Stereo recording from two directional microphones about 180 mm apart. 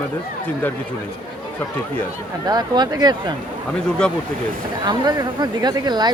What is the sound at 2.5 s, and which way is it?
Speech, 25° right (ahead or behind).